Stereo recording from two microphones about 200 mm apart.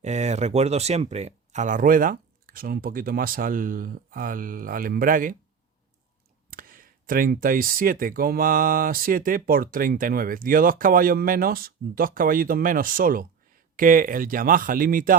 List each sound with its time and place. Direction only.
0.0 s speech: 35° right (ahead or behind)
6.5 s speech: 45° right (ahead or behind)